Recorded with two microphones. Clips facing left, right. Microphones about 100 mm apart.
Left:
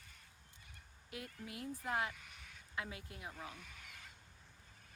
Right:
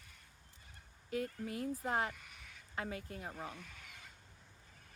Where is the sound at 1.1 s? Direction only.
40° right (ahead or behind).